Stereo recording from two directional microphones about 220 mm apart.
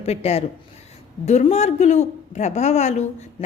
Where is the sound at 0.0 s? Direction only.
30° left (ahead or behind).